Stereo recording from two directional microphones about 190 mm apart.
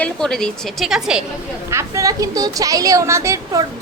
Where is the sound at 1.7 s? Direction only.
15° right (ahead or behind).